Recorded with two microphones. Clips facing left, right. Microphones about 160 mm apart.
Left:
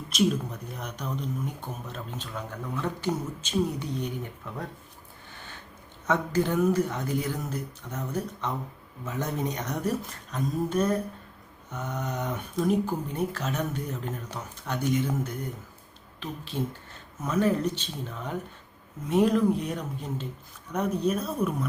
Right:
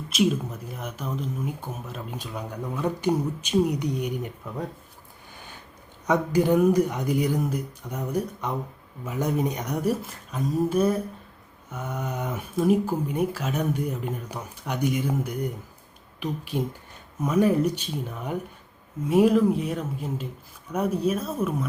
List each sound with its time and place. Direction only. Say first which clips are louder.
0.1 s speech: right 2 dB; 5° right (ahead or behind)
5.3 s a sound: right 1 dB; 10° right (ahead or behind)
6.1 s speech: right 5 dB; 15° right (ahead or behind)